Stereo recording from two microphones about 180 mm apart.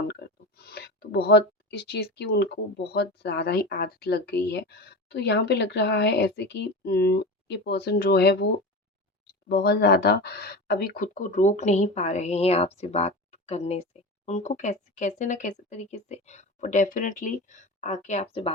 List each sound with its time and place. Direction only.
0.1 s speech: 65° left (ahead or behind); by 18.5 s 35° left (ahead or behind)